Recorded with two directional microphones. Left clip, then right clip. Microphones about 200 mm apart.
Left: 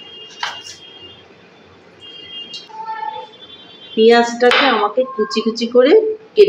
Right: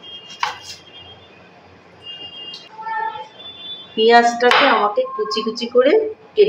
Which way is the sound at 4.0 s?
10° left (ahead or behind).